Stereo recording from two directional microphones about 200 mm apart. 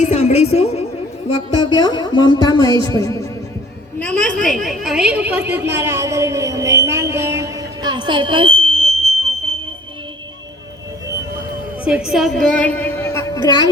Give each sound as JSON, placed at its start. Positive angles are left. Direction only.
{"t": 0.0, "sound": "a woman's voice", "side_deg": 35}
{"t": 4.0, "sound": "a woman's voice", "side_deg": 5}
{"t": 11.9, "sound": "a woman's voice", "side_deg": -5}